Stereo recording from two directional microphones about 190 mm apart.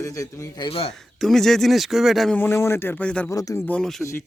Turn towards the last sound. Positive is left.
turn(degrees=15)  # may be behind; listen again after turning